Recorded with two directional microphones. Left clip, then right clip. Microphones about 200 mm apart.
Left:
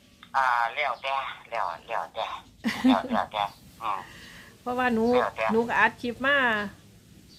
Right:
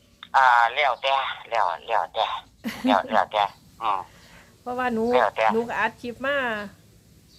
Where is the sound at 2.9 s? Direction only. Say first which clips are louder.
Right 5 dB; 40° right (ahead or behind).